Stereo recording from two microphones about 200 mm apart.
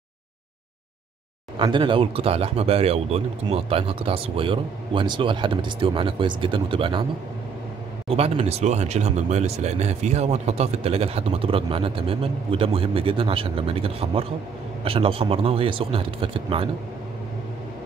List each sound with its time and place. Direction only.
1.6 s speech: 25° right (ahead or behind)
8.1 s speech: 30° right (ahead or behind)